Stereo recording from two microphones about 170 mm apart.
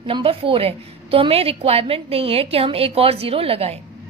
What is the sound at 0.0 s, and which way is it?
A woman's voice, 30° right (ahead or behind).